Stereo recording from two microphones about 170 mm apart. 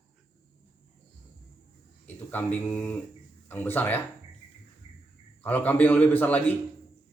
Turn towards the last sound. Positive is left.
turn(degrees=10)  # may be behind; listen again after turning